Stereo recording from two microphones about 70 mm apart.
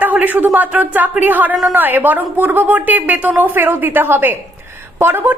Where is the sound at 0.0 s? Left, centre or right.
Right.